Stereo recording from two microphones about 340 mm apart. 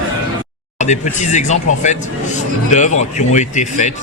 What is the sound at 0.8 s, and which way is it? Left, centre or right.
A man's voice, left.